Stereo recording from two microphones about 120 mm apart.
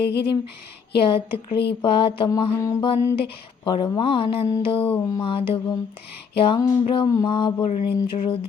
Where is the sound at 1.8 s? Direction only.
50° left (ahead or behind).